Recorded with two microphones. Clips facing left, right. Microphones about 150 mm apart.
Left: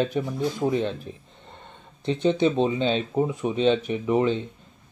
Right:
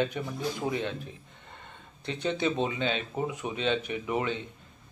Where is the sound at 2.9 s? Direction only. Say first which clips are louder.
Left 7 dB; 30° left (ahead or behind).